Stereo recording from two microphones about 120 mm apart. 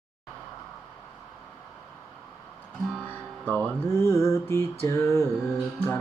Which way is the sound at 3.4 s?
15° left (ahead or behind).